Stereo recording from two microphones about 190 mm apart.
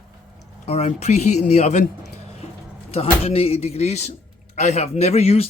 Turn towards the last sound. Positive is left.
turn(degrees=30)  # may be behind; listen again after turning